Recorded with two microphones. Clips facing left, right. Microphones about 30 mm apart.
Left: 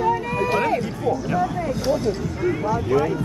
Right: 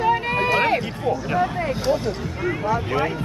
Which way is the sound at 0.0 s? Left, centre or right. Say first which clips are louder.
Right 1 dB; right.